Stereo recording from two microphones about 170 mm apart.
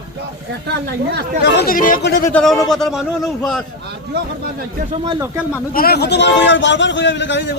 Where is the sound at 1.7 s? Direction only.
55° left (ahead or behind).